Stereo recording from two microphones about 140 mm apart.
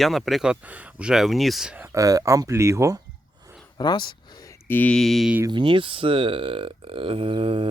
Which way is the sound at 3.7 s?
30° left (ahead or behind).